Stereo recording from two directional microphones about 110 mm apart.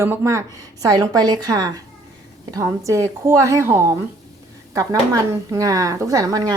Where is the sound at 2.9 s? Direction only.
25° right (ahead or behind).